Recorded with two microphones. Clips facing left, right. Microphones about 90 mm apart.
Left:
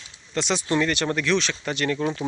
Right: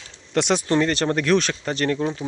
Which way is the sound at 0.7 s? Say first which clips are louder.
Right 3 dB; 35° right (ahead or behind).